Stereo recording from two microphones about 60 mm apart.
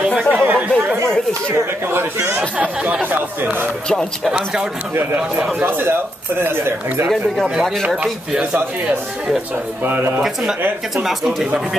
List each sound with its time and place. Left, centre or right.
0.3 s chatter: right
1.5 s a man's voice: right
2.3 s speech: right
4.2 s speech: centre
5.1 s speech: right
5.7 s a man's voice: right
8.0 s speech: centre
11.1 s speech: centre